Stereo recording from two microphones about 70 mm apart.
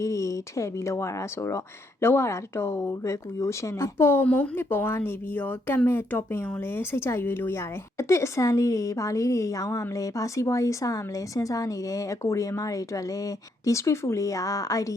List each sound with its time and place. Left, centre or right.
0.0 s speech: left